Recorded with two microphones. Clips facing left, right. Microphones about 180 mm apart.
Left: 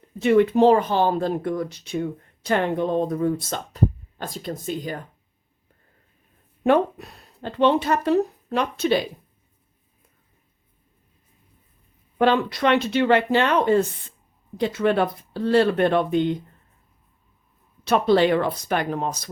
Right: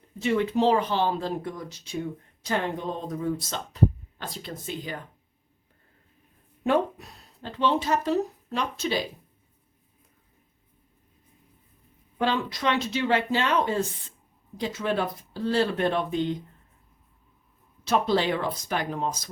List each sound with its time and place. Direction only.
0.2 s speech: 55° left (ahead or behind)
6.6 s speech: 60° left (ahead or behind)
12.2 s speech: 60° left (ahead or behind)
17.8 s speech: 60° left (ahead or behind)